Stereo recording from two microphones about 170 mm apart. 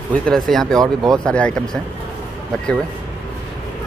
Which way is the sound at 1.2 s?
5° left (ahead or behind).